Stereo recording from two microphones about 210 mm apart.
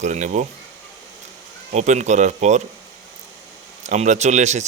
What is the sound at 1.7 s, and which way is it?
Speech, 35° right (ahead or behind).